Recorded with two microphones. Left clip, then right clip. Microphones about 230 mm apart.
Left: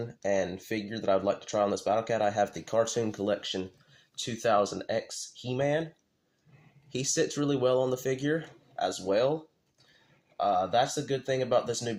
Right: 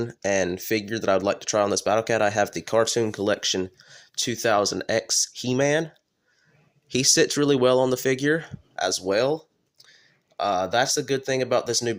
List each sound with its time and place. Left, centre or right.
0.0 s speech: right
6.8 s speech: right
10.3 s speech: right